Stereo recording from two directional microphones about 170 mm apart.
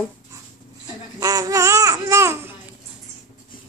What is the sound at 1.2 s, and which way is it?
Speech, 20° right (ahead or behind).